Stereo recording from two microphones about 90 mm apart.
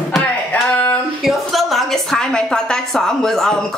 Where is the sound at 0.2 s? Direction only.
15° left (ahead or behind).